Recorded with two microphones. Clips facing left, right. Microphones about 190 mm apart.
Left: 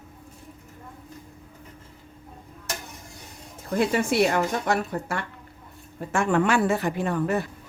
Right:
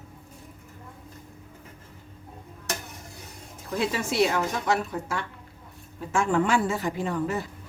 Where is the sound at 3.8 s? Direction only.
55° left (ahead or behind).